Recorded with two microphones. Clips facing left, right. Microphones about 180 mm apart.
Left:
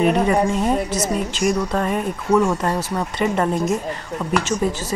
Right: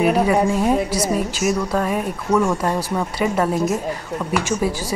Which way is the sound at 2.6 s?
10° right (ahead or behind).